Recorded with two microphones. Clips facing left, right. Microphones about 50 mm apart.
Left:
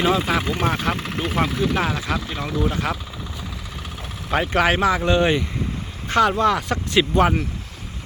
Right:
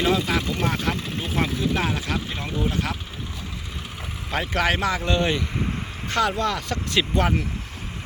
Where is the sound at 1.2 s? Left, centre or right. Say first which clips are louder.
Left 4 dB; left.